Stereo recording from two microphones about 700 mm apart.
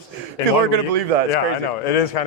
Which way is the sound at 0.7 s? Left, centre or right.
Right.